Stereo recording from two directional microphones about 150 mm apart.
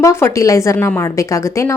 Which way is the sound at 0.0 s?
20° left (ahead or behind).